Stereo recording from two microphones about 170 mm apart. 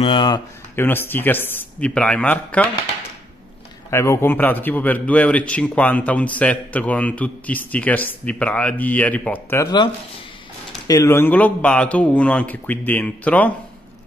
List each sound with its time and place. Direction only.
0.0 s speech: 30° left (ahead or behind)
0.7 s speech: 15° left (ahead or behind)
3.9 s speech: 15° left (ahead or behind)
10.9 s speech: 15° left (ahead or behind)